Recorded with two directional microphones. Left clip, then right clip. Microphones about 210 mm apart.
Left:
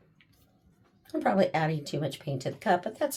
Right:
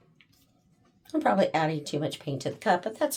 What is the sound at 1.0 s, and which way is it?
Speech, 15° right (ahead or behind).